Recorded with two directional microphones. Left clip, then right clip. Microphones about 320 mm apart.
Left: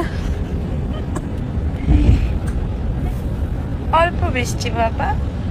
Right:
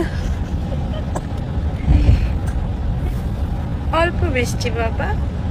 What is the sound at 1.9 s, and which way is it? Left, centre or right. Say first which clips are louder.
Vehicle: left 3 dB; centre.